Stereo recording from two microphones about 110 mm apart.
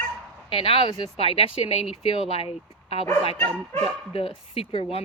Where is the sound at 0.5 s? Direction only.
55° left (ahead or behind).